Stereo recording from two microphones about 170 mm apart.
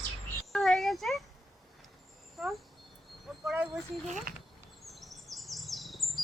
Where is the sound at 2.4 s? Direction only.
Centre (ahead or behind).